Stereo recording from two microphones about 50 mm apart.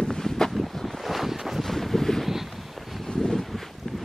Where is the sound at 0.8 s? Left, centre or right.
Centre.